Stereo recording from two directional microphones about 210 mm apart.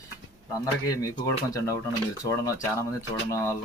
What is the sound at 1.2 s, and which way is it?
Speech, 15° left (ahead or behind).